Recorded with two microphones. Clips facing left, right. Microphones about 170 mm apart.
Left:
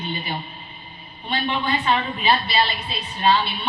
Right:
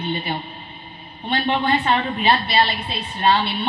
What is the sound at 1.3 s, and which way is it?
Speech, 60° right (ahead or behind).